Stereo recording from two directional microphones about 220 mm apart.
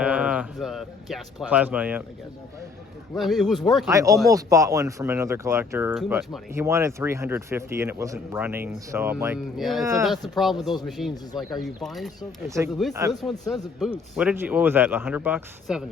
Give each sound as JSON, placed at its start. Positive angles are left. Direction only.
{"t": 0.0, "sound": "a man's voice", "side_deg": -5}
{"t": 3.2, "sound": "speech", "side_deg": 0}
{"t": 3.8, "sound": "speech", "side_deg": -15}
{"t": 5.9, "sound": "speech", "side_deg": 0}
{"t": 6.5, "sound": "speech", "side_deg": -10}
{"t": 12.5, "sound": "speech", "side_deg": -15}
{"t": 13.2, "sound": "speech", "side_deg": 0}